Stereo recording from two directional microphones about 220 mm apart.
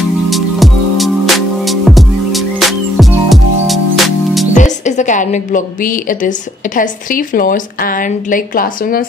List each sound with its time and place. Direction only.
0.3 s music: centre (ahead or behind)
4.6 s a woman's voice: 35° left (ahead or behind)